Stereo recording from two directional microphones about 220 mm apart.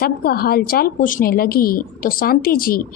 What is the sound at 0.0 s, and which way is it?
A woman's voice, 45° left (ahead or behind).